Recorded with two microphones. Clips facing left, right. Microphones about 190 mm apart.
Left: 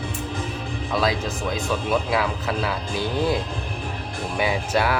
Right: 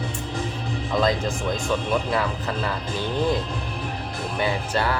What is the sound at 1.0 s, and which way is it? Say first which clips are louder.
Speech: right 2 dB; 5° left (ahead or behind).